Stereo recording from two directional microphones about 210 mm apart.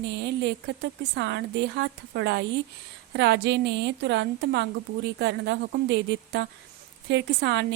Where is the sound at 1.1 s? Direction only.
55° right (ahead or behind).